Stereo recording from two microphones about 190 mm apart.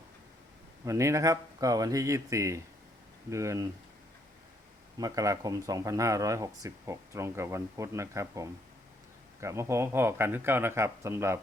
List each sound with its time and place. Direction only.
0.9 s speech: 15° right (ahead or behind)
4.9 s speech: 20° right (ahead or behind)